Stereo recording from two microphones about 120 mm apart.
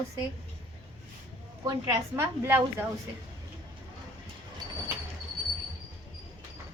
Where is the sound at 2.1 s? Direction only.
20° right (ahead or behind).